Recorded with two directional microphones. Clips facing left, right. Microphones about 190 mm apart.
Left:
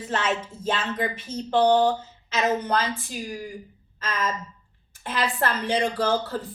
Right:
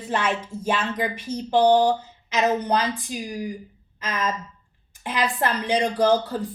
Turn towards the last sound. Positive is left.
turn(degrees=-15)  # may be behind; listen again after turning